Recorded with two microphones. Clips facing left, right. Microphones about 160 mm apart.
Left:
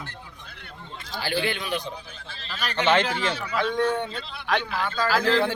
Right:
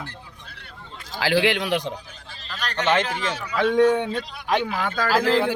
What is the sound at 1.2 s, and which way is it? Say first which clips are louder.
Speech: right 7 dB; 90° right.